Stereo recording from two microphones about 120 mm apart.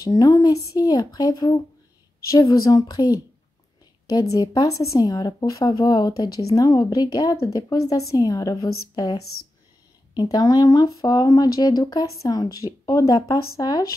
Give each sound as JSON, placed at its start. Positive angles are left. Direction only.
{"t": 0.0, "sound": "speech", "side_deg": 30}
{"t": 10.3, "sound": "speech", "side_deg": 35}